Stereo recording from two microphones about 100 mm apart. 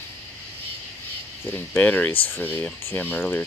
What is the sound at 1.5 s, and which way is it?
Speech, 15° left (ahead or behind).